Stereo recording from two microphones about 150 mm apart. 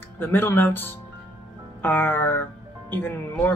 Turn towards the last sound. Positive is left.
turn(degrees=15)  # may be behind; listen again after turning